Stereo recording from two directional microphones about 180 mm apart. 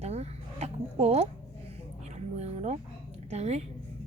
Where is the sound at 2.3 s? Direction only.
40° right (ahead or behind).